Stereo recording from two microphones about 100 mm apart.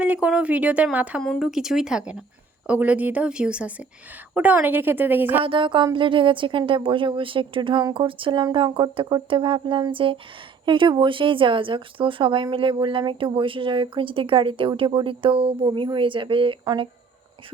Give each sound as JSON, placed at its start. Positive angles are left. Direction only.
{"t": 0.0, "sound": "a woman's voice", "side_deg": -15}
{"t": 5.4, "sound": "a woman's voice", "side_deg": -60}
{"t": 15.6, "sound": "a woman's voice", "side_deg": -50}